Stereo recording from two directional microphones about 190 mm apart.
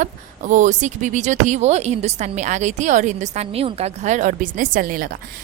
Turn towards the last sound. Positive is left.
turn(degrees=-50)  # may be behind; listen again after turning